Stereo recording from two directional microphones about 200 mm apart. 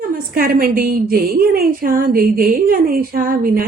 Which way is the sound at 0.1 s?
45° right (ahead or behind).